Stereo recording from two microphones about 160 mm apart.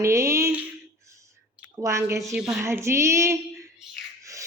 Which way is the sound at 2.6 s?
15° right (ahead or behind).